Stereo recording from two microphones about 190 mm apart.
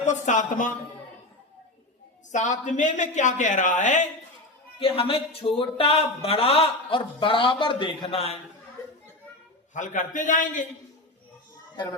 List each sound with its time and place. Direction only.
0.0 s speech: 40° left (ahead or behind)
2.3 s speech: 40° left (ahead or behind)
4.8 s speech: 30° left (ahead or behind)
9.7 s a man's voice: 40° left (ahead or behind)